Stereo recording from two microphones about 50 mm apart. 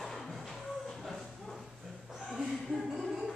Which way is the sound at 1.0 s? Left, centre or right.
Centre.